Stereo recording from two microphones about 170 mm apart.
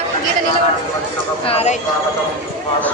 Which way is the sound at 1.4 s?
35° left (ahead or behind).